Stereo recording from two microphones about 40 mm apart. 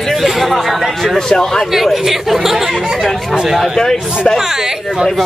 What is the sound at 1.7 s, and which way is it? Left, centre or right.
Speech, centre.